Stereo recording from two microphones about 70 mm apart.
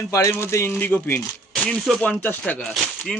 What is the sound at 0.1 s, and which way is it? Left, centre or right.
Speech, left.